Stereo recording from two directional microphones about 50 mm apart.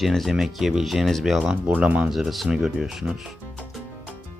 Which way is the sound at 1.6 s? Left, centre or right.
Right.